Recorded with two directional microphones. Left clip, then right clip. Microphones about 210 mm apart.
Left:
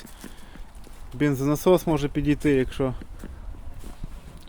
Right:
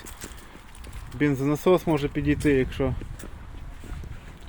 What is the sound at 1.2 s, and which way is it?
Speech, 10° left (ahead or behind).